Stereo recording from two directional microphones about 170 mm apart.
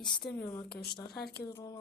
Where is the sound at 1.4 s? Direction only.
20° left (ahead or behind).